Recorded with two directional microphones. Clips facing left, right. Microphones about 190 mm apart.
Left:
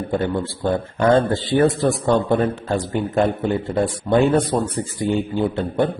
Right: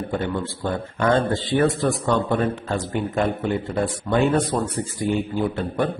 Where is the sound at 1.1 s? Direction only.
25° left (ahead or behind).